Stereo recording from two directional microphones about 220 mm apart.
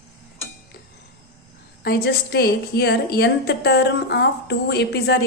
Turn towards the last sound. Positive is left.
turn(degrees=50)  # may be behind; listen again after turning